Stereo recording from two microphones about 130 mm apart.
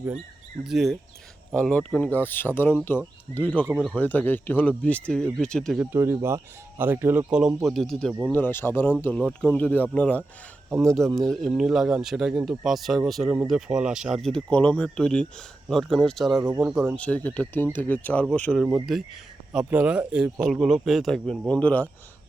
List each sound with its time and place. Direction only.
0.6 s speech: centre (ahead or behind)
5.8 s speech: 20° right (ahead or behind); by 8.1 s centre (ahead or behind)
8.3 s speech: 15° left (ahead or behind); by 16.4 s centre (ahead or behind)
16.4 s speech: 20° right (ahead or behind)
16.9 s speech: 10° left (ahead or behind)
18.6 s speech: 5° right (ahead or behind)